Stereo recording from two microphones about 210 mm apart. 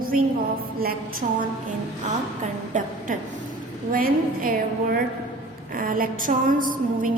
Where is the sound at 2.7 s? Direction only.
35° right (ahead or behind).